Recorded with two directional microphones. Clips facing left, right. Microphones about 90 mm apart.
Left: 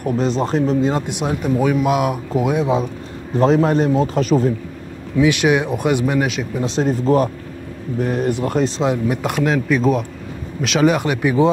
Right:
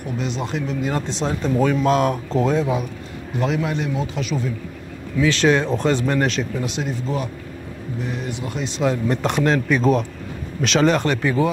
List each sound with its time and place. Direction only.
0.0 s a man's voice: 40° left (ahead or behind)
0.8 s speech: 15° left (ahead or behind)
3.3 s a man's voice: 35° left (ahead or behind)
5.1 s speech: 15° left (ahead or behind)
6.6 s a man's voice: 35° left (ahead or behind)
9.0 s speech: 5° left (ahead or behind)